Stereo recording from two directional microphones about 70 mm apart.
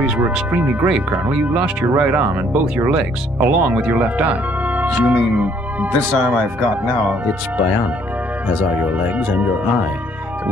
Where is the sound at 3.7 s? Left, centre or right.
Centre.